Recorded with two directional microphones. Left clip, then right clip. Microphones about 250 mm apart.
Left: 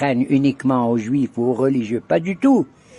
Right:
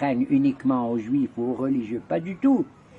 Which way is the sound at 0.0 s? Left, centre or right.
Left.